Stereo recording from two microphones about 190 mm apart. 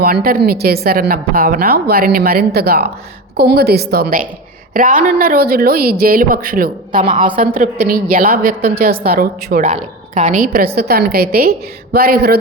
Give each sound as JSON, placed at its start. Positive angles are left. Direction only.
{"t": 0.0, "sound": "a woman's voice", "side_deg": -50}